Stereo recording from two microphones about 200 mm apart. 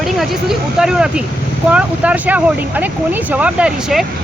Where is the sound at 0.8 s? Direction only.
5° right (ahead or behind).